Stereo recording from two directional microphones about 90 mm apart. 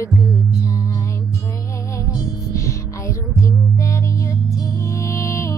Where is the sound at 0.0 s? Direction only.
35° left (ahead or behind).